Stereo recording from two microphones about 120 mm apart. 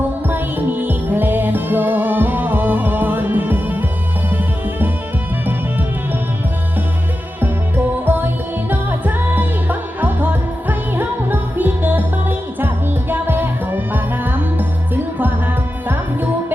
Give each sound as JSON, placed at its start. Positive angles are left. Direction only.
{"t": 0.3, "sound": "music", "side_deg": -15}
{"t": 7.4, "sound": "music", "side_deg": -15}